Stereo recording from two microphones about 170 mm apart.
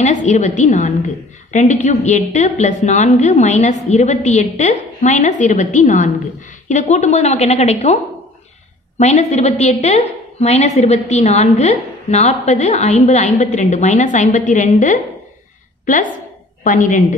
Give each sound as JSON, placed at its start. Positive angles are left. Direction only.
{"t": 0.0, "sound": "a woman's voice", "side_deg": 45}